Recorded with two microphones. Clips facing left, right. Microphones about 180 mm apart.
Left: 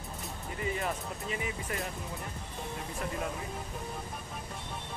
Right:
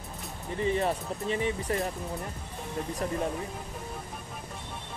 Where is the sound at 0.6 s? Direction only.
30° right (ahead or behind).